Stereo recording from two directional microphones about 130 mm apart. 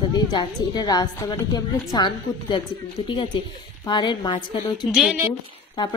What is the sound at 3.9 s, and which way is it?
Speech, 35° left (ahead or behind).